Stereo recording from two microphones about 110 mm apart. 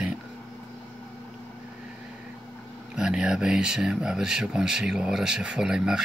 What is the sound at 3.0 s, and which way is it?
Speech, 5° right (ahead or behind).